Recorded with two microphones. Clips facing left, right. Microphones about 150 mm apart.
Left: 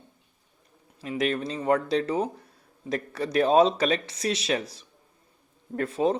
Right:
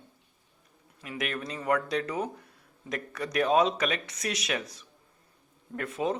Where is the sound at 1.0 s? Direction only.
30° left (ahead or behind).